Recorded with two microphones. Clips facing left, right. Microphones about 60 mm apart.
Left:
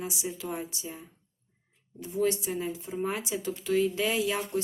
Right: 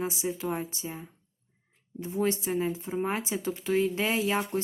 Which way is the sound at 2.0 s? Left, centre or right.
Right.